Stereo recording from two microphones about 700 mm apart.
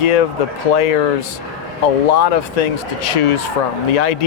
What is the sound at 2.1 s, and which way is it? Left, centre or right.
Speech, left.